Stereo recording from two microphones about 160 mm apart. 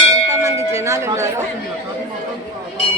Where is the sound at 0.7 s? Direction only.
20° right (ahead or behind).